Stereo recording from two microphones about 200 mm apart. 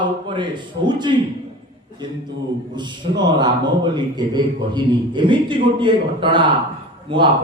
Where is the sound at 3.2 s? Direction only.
20° right (ahead or behind).